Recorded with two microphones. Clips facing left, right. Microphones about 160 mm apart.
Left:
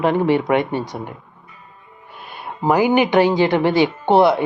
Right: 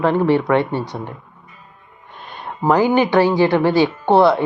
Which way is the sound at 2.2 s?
10° left (ahead or behind).